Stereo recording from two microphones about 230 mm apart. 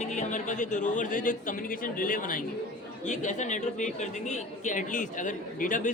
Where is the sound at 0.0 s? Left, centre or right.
Left.